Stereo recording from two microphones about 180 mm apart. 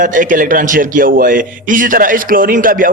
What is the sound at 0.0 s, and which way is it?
A man's voice, 45° right (ahead or behind).